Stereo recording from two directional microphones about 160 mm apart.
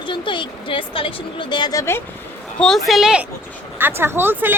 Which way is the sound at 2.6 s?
Centre (ahead or behind).